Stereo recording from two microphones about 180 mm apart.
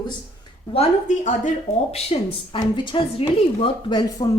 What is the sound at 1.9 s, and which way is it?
A woman's voice, 30° left (ahead or behind).